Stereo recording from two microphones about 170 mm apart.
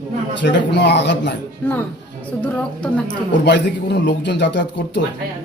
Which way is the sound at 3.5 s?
85° left.